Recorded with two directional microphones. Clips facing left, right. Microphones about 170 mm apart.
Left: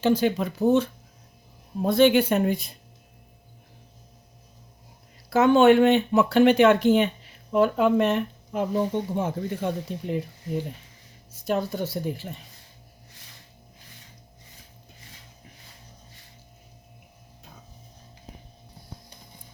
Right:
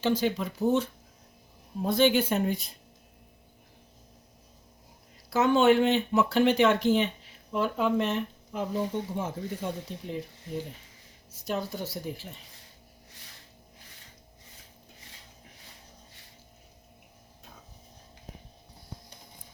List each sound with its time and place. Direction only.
0.0 s speech: 55° left (ahead or behind)
5.3 s speech: 60° left (ahead or behind)
11.4 s speech: 60° left (ahead or behind)